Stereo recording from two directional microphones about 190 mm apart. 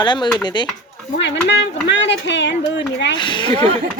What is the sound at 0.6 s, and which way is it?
Music, 25° left (ahead or behind).